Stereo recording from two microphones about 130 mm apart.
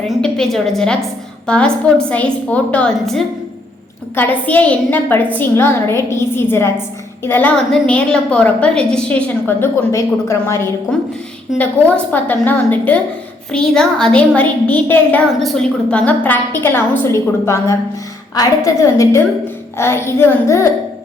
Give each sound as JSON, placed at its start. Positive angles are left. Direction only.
{"t": 0.1, "sound": "a woman's voice", "side_deg": 5}
{"t": 9.9, "sound": "a woman's voice", "side_deg": 20}
{"t": 10.9, "sound": "a woman's voice", "side_deg": 10}
{"t": 12.1, "sound": "a woman's voice", "side_deg": 15}
{"t": 15.4, "sound": "a woman's voice", "side_deg": 0}